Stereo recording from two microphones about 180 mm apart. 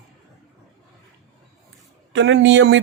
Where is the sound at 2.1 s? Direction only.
85° right.